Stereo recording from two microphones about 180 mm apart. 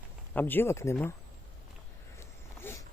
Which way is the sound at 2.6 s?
15° left (ahead or behind).